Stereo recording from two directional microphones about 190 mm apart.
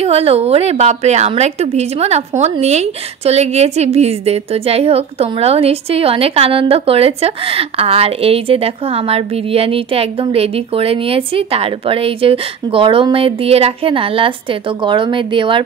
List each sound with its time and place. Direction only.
0.0 s a woman's voice: 30° right (ahead or behind)